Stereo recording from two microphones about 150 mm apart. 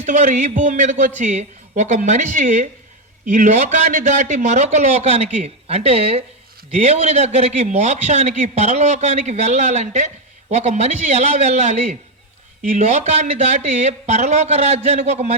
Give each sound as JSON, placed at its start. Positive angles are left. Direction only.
{"t": 0.0, "sound": "a man's voice", "side_deg": -50}